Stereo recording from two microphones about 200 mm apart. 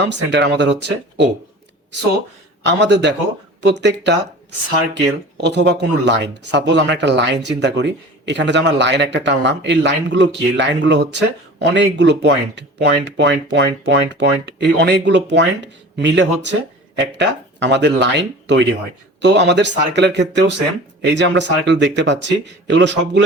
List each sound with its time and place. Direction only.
0.0 s speech: 60° right (ahead or behind)
2.6 s speech: 60° right (ahead or behind)
5.4 s speech: 60° right (ahead or behind)